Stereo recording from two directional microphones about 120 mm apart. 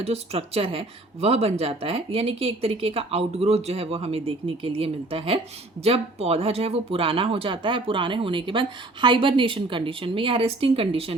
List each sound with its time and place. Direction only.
0.0 s speech: 60° right (ahead or behind)
5.8 s speech: 60° right (ahead or behind)